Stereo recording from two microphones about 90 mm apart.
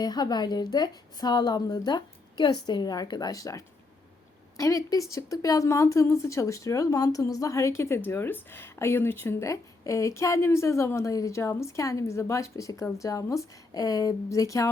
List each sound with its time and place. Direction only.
0.0 s a woman's voice: 50° left (ahead or behind)